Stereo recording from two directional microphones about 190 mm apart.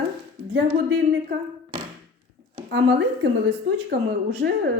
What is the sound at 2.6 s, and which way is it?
A woman's voice, 65° right (ahead or behind).